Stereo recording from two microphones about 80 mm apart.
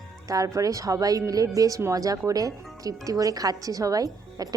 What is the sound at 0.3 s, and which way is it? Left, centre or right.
Speech, right.